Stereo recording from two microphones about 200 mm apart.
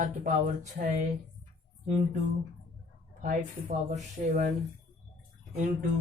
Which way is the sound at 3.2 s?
35° right (ahead or behind).